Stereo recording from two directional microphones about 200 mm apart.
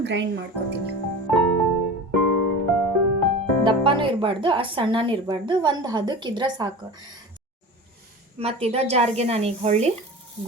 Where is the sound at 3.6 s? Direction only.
25° right (ahead or behind).